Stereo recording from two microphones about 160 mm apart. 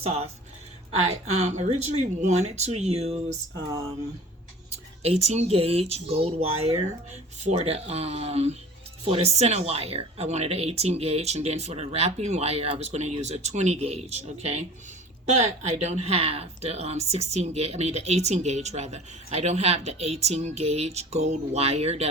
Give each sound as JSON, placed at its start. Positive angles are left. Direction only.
{"t": 0.0, "sound": "speech", "side_deg": -40}
{"t": 1.4, "sound": "speech", "side_deg": -45}
{"t": 5.0, "sound": "speech", "side_deg": -40}